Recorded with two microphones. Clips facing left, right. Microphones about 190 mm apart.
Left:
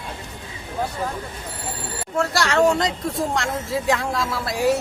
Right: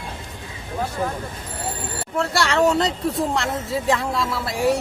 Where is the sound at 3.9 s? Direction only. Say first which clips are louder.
Right 1 dB; centre (ahead or behind).